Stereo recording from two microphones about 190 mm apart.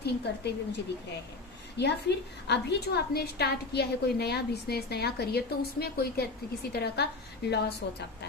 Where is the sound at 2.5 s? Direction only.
60° left (ahead or behind).